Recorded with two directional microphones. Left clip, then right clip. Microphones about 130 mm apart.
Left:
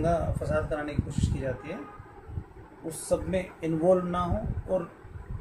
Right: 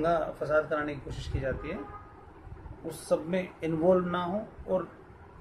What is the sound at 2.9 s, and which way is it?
A man's voice, 15° right (ahead or behind).